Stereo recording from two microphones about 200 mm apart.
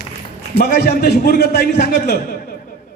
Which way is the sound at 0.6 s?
50° left (ahead or behind).